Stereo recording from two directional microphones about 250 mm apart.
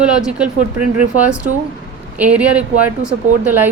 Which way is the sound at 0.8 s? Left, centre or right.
Right.